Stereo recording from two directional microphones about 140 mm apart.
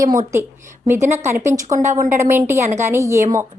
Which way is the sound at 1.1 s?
15° right (ahead or behind).